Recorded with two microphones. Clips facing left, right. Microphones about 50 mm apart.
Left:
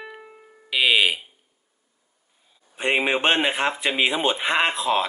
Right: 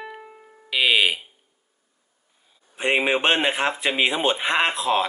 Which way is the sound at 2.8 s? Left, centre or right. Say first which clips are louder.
Right 1 dB; centre.